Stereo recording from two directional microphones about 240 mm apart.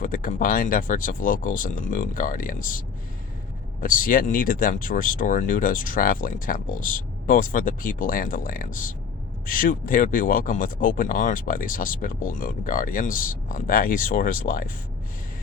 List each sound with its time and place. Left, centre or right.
0.0 s speech: left